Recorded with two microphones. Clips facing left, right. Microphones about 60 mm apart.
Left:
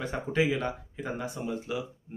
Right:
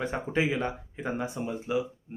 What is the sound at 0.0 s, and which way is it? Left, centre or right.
Speech, right.